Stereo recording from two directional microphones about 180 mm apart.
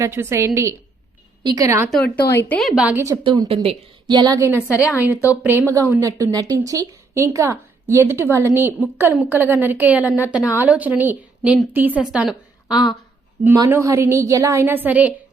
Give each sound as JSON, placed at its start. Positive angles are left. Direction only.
{"t": 0.0, "sound": "a woman's voice", "side_deg": -15}
{"t": 2.4, "sound": "a woman's voice", "side_deg": 5}
{"t": 3.2, "sound": "a woman's voice", "side_deg": -20}
{"t": 3.5, "sound": "a woman's voice", "side_deg": -35}
{"t": 4.1, "sound": "a woman's voice", "side_deg": -20}
{"t": 12.7, "sound": "speech", "side_deg": 20}
{"t": 13.4, "sound": "a woman's voice", "side_deg": -15}